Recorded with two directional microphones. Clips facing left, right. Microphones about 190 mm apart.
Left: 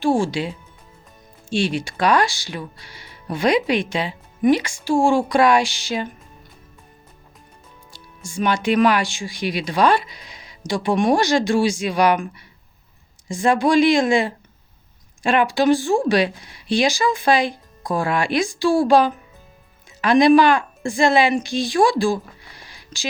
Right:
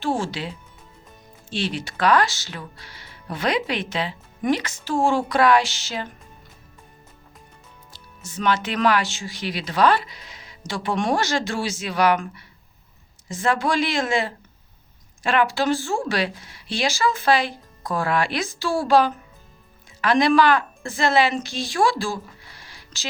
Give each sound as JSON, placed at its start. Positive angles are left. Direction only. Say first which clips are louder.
{"t": 0.0, "sound": "speech", "louder": "left 6 dB", "side_deg": 15}
{"t": 7.9, "sound": "a woman's voice", "louder": "left 6 dB", "side_deg": 10}